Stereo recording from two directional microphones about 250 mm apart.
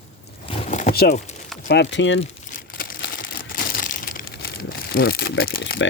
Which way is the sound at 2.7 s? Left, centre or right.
Left.